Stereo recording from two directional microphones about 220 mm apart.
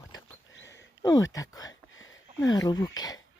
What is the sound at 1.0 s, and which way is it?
Speech, 15° left (ahead or behind).